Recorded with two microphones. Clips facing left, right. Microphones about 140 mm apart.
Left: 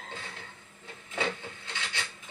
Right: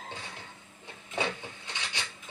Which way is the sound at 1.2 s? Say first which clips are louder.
Even; 15° right (ahead or behind).